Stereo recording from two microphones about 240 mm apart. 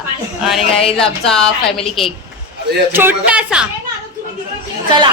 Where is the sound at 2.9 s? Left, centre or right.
Centre.